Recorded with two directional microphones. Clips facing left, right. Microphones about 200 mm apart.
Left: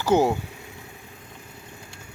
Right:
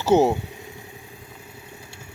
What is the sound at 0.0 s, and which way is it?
Speech, 25° right (ahead or behind).